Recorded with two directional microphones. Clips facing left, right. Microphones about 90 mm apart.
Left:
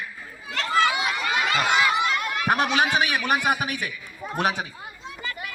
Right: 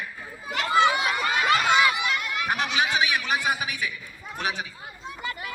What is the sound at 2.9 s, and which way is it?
A man's voice, 50° left (ahead or behind).